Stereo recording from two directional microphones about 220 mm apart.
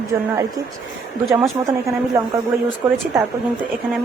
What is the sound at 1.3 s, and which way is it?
Speech, 10° right (ahead or behind).